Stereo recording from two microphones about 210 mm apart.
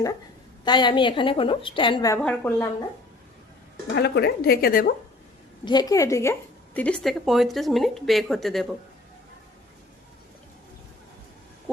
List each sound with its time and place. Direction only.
0.6 s a woman's voice: 20° left (ahead or behind)
2.2 s a woman's voice: 10° left (ahead or behind)
3.9 s a woman's voice: 50° left (ahead or behind)
5.6 s a woman's voice: 20° left (ahead or behind); by 8.6 s centre (ahead or behind)